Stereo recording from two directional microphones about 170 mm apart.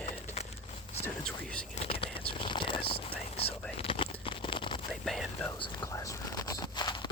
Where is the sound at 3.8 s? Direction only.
30° left (ahead or behind).